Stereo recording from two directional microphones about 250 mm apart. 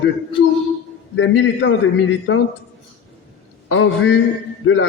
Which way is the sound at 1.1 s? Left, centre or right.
Left.